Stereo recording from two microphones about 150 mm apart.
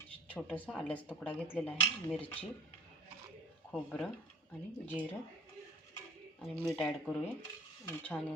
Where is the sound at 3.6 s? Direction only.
10° left (ahead or behind).